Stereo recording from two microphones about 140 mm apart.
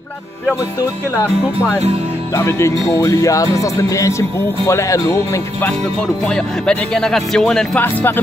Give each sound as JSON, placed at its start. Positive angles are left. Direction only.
{"t": 2.3, "sound": "speech", "side_deg": 20}
{"t": 5.7, "sound": "speech", "side_deg": 5}